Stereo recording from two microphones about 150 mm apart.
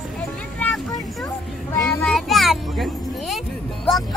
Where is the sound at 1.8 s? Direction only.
5° left (ahead or behind).